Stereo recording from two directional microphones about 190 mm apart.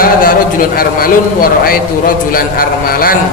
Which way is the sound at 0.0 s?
50° left (ahead or behind).